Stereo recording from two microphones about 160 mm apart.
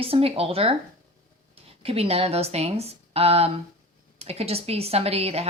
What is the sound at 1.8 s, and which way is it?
Speech, 40° right (ahead or behind).